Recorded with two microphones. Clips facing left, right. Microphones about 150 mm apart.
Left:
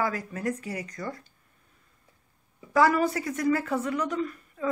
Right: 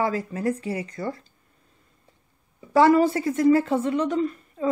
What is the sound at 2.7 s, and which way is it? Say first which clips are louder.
Speech: right 5 dB; 30° right (ahead or behind).